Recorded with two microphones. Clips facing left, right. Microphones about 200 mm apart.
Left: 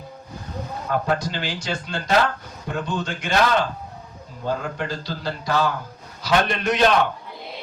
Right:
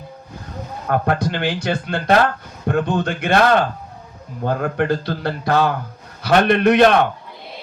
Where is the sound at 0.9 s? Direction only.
60° right (ahead or behind).